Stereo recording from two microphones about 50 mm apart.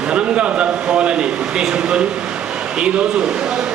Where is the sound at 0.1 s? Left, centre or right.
Right.